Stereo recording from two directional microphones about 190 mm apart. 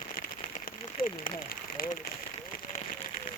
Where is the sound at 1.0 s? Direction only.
50° left (ahead or behind).